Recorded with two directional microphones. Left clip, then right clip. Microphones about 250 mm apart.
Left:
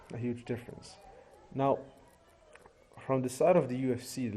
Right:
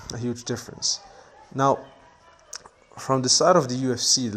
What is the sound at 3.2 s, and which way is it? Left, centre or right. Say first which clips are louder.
Speech: right 8 dB; centre.